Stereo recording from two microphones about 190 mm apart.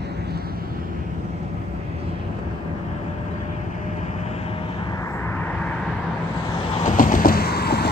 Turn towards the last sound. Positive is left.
turn(degrees=55)  # may be behind; listen again after turning